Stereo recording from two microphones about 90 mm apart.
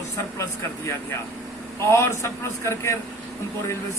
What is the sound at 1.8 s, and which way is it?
A man's voice, 30° left (ahead or behind).